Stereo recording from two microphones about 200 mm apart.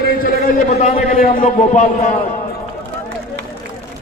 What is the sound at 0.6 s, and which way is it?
A man's voice, 35° left (ahead or behind).